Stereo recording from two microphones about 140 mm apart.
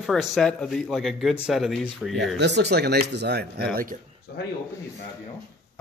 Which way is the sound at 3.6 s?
90° right.